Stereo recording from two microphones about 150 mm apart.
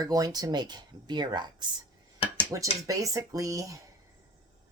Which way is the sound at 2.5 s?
15° right (ahead or behind).